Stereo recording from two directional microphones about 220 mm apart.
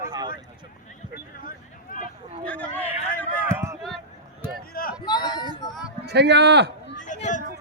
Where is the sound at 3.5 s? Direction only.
10° right (ahead or behind).